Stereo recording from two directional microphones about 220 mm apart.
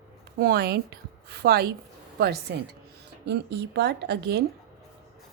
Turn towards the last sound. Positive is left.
turn(degrees=-50)  # may be behind; listen again after turning